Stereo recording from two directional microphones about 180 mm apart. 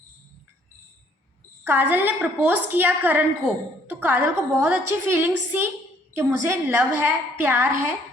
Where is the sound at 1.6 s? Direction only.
10° right (ahead or behind).